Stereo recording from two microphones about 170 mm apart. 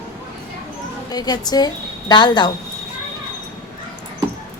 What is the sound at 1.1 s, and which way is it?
A woman's voice, 25° left (ahead or behind).